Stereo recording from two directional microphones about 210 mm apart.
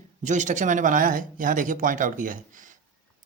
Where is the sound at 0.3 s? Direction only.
35° right (ahead or behind).